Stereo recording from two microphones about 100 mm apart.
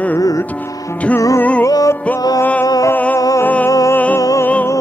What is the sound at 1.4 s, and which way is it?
Music, 15° left (ahead or behind).